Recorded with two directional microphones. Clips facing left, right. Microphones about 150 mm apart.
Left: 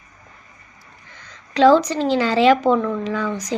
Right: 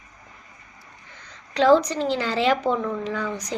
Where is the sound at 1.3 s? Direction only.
90° left.